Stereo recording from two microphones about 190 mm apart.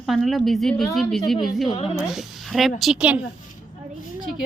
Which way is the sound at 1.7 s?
30° left (ahead or behind).